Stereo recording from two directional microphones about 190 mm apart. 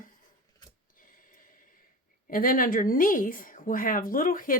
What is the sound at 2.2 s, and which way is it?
Speech, 50° left (ahead or behind).